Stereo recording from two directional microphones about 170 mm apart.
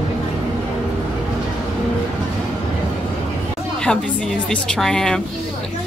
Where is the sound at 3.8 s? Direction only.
5° left (ahead or behind).